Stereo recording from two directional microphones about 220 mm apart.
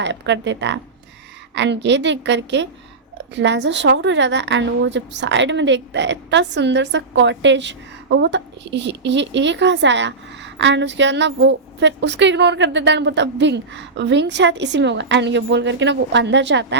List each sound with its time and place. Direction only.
0.0 s a woman's voice: 55° right (ahead or behind)